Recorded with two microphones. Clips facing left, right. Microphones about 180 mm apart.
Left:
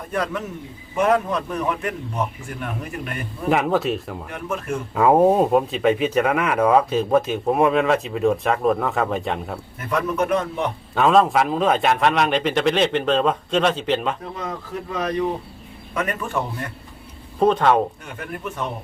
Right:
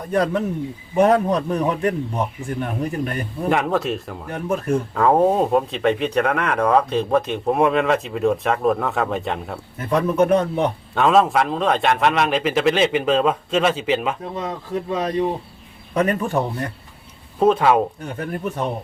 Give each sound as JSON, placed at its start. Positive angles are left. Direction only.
{"t": 0.1, "sound": "a man's voice", "side_deg": -35}
{"t": 3.5, "sound": "speech", "side_deg": 0}
{"t": 4.3, "sound": "a man's voice", "side_deg": -35}
{"t": 4.9, "sound": "speech", "side_deg": 5}
{"t": 9.9, "sound": "a man's voice", "side_deg": -30}
{"t": 10.9, "sound": "speech", "side_deg": 0}
{"t": 14.3, "sound": "a man's voice", "side_deg": -25}
{"t": 17.4, "sound": "speech", "side_deg": -5}
{"t": 18.0, "sound": "a man's voice", "side_deg": -35}